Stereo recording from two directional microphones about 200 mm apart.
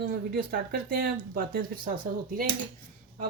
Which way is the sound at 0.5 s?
45° right (ahead or behind).